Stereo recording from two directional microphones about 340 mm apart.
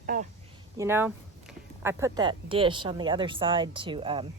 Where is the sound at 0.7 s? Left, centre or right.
Centre.